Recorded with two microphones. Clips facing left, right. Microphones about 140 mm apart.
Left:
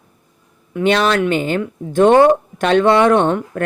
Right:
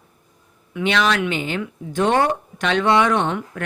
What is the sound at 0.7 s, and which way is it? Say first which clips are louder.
A woman's voice: left 5 dB; 45° left (ahead or behind).